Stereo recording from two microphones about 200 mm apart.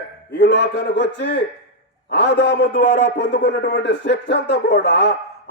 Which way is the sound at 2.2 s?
65° left (ahead or behind).